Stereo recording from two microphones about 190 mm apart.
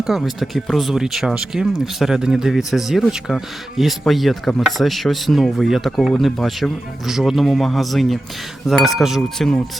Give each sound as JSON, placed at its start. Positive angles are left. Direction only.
{"t": 0.0, "sound": "speech", "side_deg": 0}